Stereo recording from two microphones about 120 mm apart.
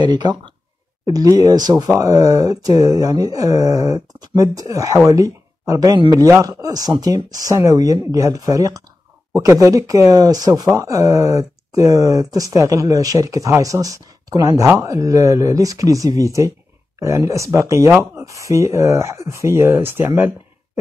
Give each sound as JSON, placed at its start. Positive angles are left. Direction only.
{"t": 0.0, "sound": "speech", "side_deg": -35}